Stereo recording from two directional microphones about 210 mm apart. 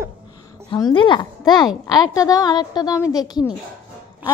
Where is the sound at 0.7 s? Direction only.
20° left (ahead or behind).